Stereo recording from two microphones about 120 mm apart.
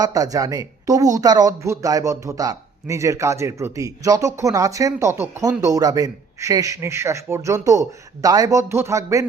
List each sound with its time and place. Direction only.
0.0 s a man's voice: 30° right (ahead or behind)
5.4 s a man's voice: 30° right (ahead or behind)